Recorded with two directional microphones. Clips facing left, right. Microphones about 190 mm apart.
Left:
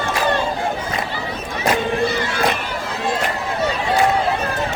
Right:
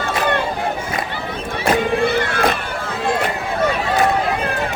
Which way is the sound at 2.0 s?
55° right (ahead or behind).